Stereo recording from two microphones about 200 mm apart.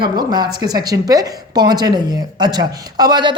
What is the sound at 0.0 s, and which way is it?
Speech, 20° right (ahead or behind).